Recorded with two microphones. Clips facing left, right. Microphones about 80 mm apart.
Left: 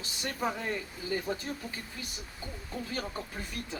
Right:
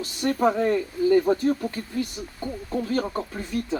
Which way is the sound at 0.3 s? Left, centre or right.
Right.